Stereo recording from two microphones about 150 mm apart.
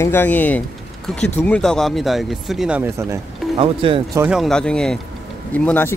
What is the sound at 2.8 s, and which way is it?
Speech, 20° right (ahead or behind).